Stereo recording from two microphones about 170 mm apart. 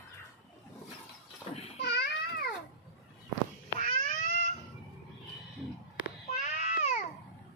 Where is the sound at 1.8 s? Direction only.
75° left (ahead or behind).